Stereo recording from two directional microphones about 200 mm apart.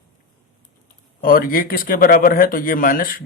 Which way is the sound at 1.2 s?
45° left (ahead or behind).